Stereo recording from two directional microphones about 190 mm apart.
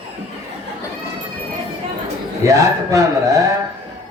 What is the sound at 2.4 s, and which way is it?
Speech, 15° right (ahead or behind).